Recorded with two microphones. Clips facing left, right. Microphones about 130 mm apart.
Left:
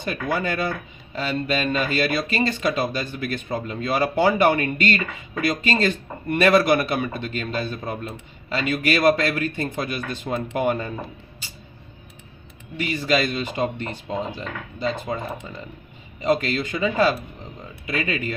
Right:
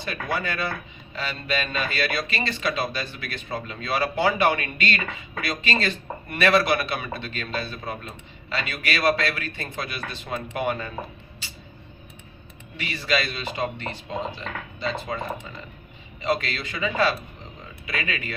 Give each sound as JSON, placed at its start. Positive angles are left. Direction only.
{"t": 0.0, "sound": "speech", "side_deg": 45}
{"t": 12.7, "sound": "speech", "side_deg": 45}
{"t": 16.2, "sound": "speech", "side_deg": 45}